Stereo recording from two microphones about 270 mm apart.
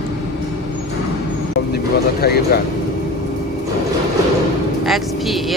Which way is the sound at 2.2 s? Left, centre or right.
Left.